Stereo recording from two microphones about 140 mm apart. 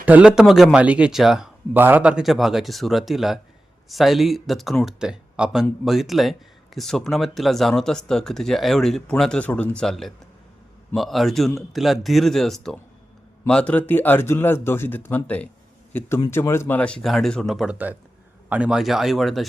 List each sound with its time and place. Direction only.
0.0 s speech: 10° right (ahead or behind)